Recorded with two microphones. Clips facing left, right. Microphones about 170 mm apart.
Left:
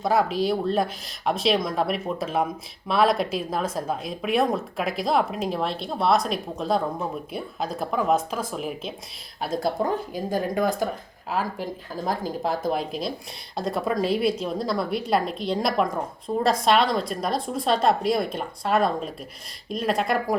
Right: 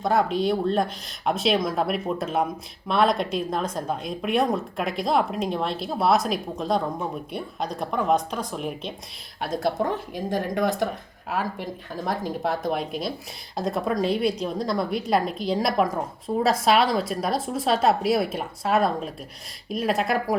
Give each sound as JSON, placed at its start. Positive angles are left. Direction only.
{"t": 0.0, "sound": "speech", "side_deg": 5}